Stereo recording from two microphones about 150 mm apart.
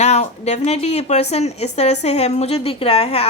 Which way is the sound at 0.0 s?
50° left (ahead or behind).